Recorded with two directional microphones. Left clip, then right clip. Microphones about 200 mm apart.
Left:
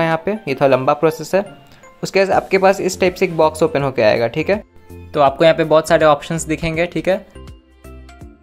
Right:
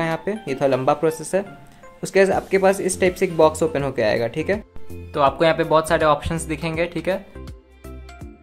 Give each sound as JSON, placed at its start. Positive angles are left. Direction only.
{"t": 0.0, "sound": "speech", "side_deg": 10}
{"t": 5.1, "sound": "speech", "side_deg": 20}